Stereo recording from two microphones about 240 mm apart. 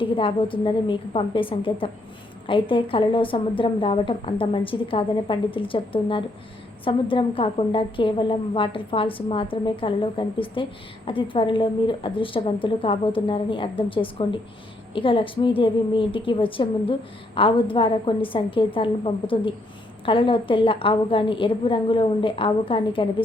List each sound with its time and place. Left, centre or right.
0.0 s a woman's voice: left